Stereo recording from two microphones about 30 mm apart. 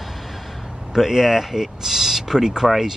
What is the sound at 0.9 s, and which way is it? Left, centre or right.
Speech, centre.